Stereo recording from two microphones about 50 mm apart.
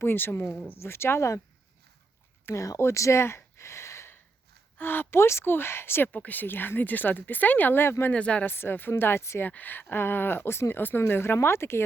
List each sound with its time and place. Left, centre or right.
0.0 s speech: left
0.8 s speech: left
2.6 s speech: left
4.8 s speech: left
6.1 s speech: left
7.7 s speech: left
8.1 s speech: left
8.4 s speech: left
9.5 s speech: left
9.9 s speech: left